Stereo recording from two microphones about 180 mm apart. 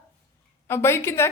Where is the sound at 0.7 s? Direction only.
15° left (ahead or behind).